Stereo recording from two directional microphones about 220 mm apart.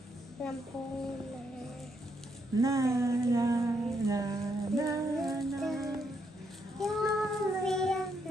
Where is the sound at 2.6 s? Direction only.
15° right (ahead or behind).